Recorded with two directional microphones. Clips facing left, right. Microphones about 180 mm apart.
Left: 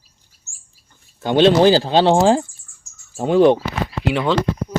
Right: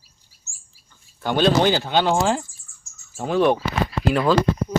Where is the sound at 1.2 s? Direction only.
20° left (ahead or behind).